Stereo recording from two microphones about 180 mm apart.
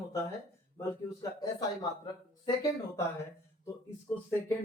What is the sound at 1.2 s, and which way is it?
Speech, 20° left (ahead or behind).